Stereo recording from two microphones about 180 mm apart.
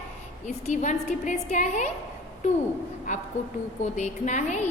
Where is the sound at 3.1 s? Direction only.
40° left (ahead or behind).